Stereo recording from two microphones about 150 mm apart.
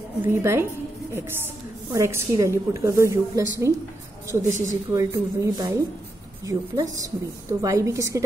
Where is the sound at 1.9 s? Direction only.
20° right (ahead or behind).